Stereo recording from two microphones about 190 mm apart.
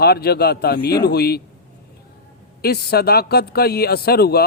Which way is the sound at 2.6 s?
55° left (ahead or behind).